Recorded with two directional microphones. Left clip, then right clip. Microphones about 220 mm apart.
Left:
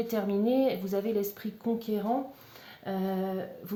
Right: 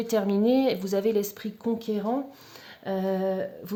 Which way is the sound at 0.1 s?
45° right (ahead or behind).